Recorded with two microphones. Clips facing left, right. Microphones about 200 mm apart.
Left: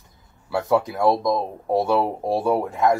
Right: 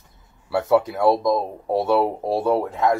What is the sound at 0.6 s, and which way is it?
Speech, 5° right (ahead or behind).